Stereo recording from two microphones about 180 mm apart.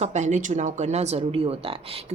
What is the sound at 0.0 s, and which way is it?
A woman's voice, 40° right (ahead or behind).